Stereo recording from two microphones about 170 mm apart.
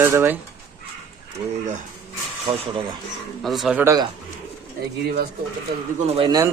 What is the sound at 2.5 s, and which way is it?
Speech, 35° right (ahead or behind).